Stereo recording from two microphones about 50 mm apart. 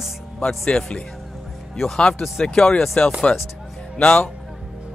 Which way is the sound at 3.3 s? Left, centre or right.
Left.